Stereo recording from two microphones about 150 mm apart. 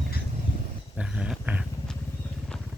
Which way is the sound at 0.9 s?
5° right (ahead or behind).